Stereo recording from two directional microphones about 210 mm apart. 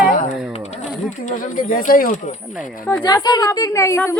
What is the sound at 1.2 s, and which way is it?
Speech, 40° left (ahead or behind).